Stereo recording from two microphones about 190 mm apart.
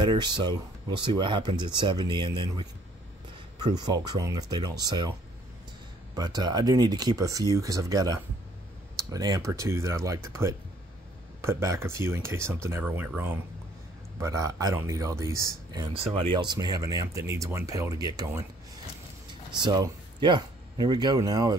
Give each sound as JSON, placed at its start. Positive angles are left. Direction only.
{"t": 0.0, "sound": "speech", "side_deg": -25}
{"t": 6.1, "sound": "speech", "side_deg": -20}
{"t": 19.5, "sound": "speech", "side_deg": -20}